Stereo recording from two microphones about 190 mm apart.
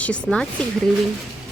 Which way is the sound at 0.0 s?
5° left (ahead or behind).